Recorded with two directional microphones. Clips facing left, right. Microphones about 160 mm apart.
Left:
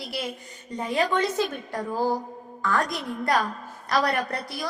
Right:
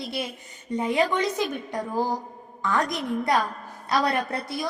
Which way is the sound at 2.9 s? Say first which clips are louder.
Right 1 dB; 20° right (ahead or behind).